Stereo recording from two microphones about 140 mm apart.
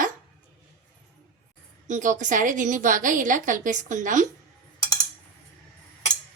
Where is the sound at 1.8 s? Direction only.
60° right (ahead or behind).